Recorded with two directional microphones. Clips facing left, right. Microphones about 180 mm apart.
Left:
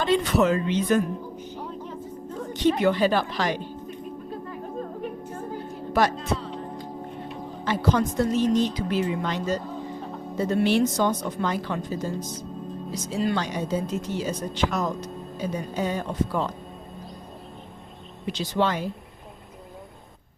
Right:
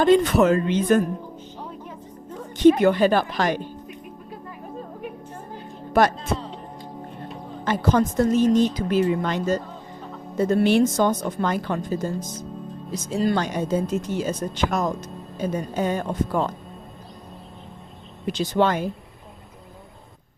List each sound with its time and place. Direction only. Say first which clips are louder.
0.0 s speech: right 5 dB; 50° right (ahead or behind)
2.5 s speech: right 6 dB; 50° right (ahead or behind)
7.6 s speech: right 3 dB; 50° right (ahead or behind)
18.3 s speech: right 4 dB; 50° right (ahead or behind)